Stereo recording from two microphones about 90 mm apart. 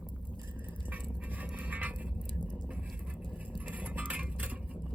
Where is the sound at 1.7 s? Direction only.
15° right (ahead or behind).